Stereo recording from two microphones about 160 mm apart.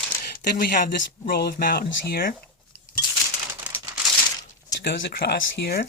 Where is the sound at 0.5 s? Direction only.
70° left (ahead or behind).